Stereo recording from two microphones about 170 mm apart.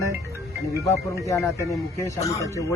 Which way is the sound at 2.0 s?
20° left (ahead or behind).